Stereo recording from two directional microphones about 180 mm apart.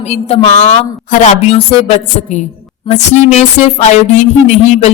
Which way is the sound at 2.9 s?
40° left (ahead or behind).